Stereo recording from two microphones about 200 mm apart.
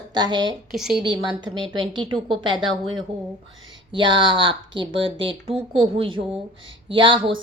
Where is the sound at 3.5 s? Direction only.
75° right (ahead or behind).